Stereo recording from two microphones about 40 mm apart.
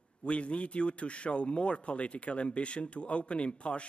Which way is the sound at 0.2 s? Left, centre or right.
Left.